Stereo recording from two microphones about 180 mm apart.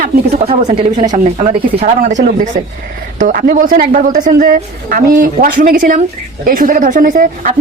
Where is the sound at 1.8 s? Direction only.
50° right (ahead or behind).